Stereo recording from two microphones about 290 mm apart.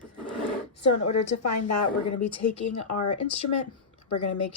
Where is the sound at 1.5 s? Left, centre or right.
Left.